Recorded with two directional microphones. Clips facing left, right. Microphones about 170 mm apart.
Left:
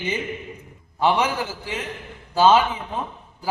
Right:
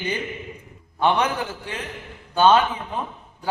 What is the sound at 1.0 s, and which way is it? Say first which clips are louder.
A man's voice: even; 5° left (ahead or behind).